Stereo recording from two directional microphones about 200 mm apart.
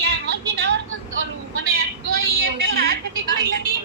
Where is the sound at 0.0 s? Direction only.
55° right (ahead or behind).